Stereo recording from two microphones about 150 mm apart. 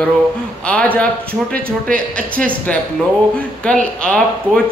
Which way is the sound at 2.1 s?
10° left (ahead or behind).